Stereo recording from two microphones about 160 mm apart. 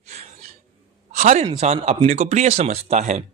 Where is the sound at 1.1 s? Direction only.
45° right (ahead or behind).